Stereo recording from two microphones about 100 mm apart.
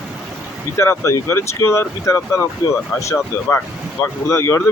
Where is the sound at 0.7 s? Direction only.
30° left (ahead or behind).